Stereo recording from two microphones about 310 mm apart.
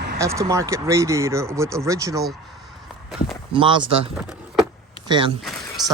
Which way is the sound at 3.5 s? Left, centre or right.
Centre.